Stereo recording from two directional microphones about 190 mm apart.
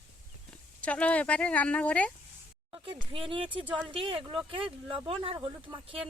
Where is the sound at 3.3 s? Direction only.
25° right (ahead or behind).